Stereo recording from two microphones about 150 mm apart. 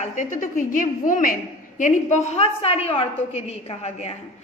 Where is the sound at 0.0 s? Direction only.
55° left (ahead or behind).